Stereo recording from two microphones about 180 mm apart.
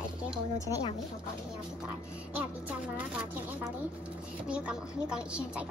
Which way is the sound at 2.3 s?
10° right (ahead or behind).